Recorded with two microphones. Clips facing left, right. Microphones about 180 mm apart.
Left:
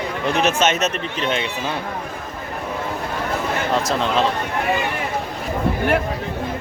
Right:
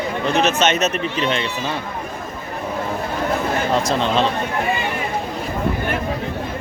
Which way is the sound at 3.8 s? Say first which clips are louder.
Right 1 dB; centre (ahead or behind).